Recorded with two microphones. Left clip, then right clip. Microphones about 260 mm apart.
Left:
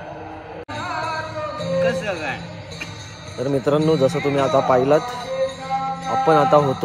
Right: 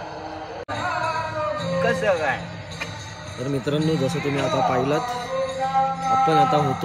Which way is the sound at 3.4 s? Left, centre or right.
Centre.